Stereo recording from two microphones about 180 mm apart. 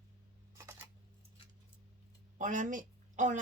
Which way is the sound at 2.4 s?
45° right (ahead or behind).